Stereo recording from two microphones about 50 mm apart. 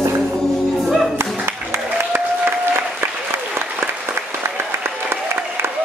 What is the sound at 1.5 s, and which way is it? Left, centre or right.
Music, right.